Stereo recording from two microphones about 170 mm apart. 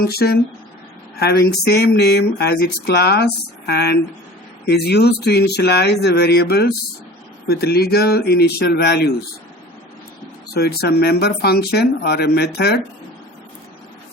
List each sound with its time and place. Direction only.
0.0 s speech: 65° left (ahead or behind)
10.5 s speech: 65° left (ahead or behind)